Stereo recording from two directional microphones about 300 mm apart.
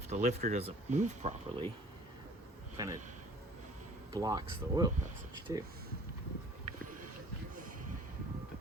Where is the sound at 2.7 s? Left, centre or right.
Centre.